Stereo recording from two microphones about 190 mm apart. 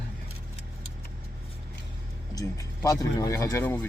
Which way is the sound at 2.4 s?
20° left (ahead or behind).